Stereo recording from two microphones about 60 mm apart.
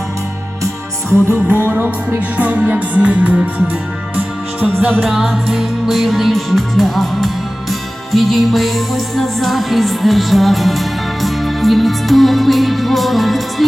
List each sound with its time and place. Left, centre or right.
1.5 s music: right
5.1 s music: centre